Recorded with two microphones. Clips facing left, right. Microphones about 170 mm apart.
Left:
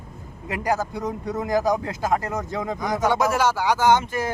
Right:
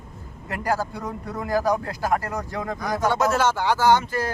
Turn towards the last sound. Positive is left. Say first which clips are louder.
# even
turn(degrees=20)  # may be behind; listen again after turning